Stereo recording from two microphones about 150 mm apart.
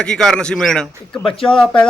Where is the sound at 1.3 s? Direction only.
35° left (ahead or behind).